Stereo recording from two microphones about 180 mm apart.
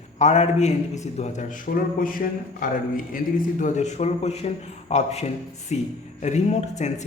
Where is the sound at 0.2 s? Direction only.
40° left (ahead or behind).